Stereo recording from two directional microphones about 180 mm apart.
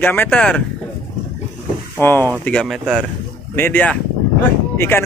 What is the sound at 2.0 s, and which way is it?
Speech, 10° left (ahead or behind).